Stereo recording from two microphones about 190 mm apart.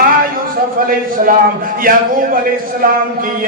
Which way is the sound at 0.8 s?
50° right (ahead or behind).